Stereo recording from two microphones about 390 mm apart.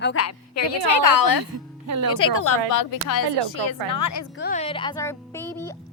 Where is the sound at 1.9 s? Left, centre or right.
Right.